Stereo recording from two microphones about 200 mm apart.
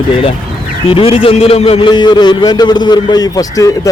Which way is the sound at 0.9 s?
25° left (ahead or behind).